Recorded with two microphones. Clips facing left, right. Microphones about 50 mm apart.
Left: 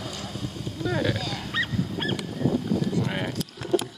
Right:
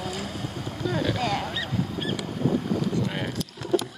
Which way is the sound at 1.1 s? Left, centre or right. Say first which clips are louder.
Right 6 dB; right.